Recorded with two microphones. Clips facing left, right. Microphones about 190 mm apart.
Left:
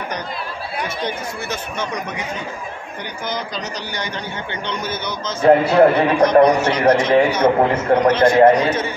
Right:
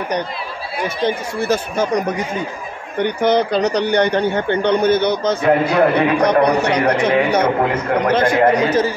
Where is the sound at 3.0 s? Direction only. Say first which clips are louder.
Right 13 dB; 65° right (ahead or behind).